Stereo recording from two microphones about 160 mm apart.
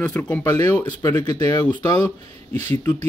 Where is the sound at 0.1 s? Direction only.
15° left (ahead or behind).